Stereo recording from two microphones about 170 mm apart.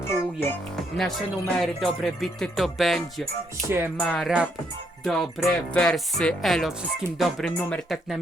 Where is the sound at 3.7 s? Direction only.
10° right (ahead or behind).